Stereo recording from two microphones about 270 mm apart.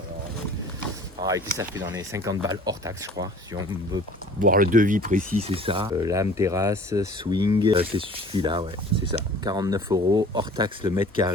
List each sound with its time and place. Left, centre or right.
1.2 s speech: centre
4.4 s speech: right